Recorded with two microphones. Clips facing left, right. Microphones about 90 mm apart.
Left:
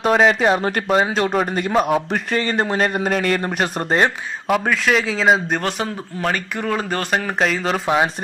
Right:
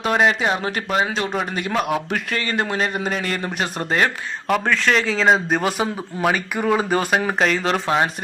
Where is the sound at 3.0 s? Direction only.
45° left (ahead or behind).